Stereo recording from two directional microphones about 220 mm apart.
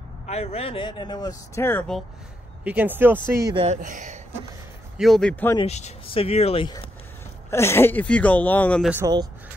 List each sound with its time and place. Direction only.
0.3 s speech: 30° left (ahead or behind); by 2.0 s 5° left (ahead or behind)
2.6 s speech: 5° right (ahead or behind)
3.6 s speech: 35° right (ahead or behind)
4.9 s a man's voice: centre (ahead or behind)
5.6 s speech: 30° left (ahead or behind)
7.5 s speech: 10° left (ahead or behind)
8.9 s speech: 15° right (ahead or behind)